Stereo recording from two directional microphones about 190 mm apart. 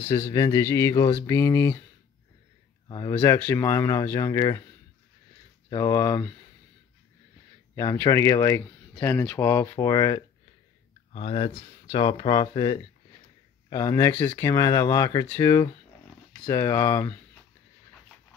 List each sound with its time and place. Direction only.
0.1 s speech: 20° left (ahead or behind)
2.9 s speech: 15° left (ahead or behind)
5.7 s speech: 20° left (ahead or behind)
7.7 s speech: 20° left (ahead or behind)